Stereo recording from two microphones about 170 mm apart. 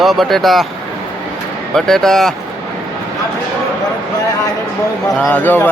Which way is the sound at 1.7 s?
Centre (ahead or behind).